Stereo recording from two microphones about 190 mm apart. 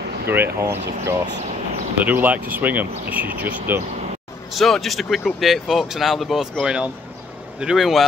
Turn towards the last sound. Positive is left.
turn(degrees=0)  # may be behind; listen again after turning